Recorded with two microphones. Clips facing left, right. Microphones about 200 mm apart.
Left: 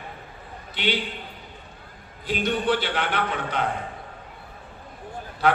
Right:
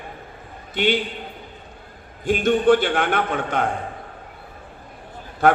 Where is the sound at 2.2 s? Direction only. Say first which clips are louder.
Right 8 dB; 50° right (ahead or behind).